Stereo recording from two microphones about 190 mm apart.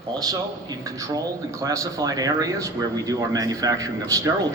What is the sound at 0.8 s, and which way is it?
Speech, 15° right (ahead or behind).